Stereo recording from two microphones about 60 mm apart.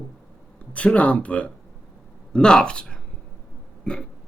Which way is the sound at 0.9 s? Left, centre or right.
Left.